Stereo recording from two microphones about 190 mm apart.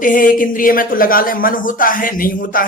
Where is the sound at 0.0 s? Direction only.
45° left (ahead or behind).